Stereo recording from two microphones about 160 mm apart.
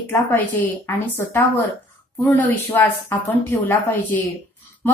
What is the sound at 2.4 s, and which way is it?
Speech, 10° left (ahead or behind).